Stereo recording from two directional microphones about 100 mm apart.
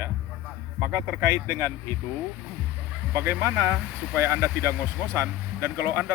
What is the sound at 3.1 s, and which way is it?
Speech, 25° right (ahead or behind).